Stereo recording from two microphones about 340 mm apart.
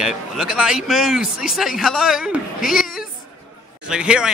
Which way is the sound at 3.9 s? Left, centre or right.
Centre.